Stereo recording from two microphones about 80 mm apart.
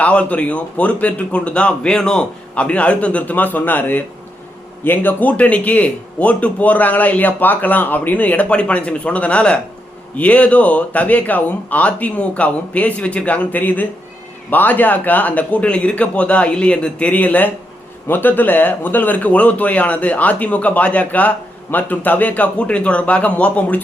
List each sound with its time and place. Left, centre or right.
0.0 s a man's voice: centre